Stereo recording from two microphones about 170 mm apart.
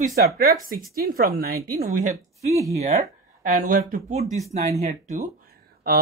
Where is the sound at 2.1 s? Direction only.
20° right (ahead or behind).